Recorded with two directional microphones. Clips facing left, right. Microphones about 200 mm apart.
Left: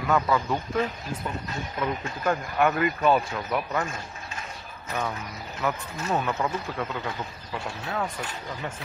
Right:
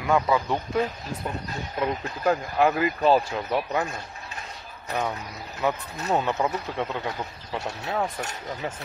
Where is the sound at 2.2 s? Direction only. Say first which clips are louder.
Right 2 dB; 30° right (ahead or behind).